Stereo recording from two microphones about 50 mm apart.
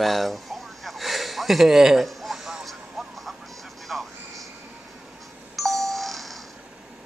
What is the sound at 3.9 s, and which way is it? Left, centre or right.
Music, centre.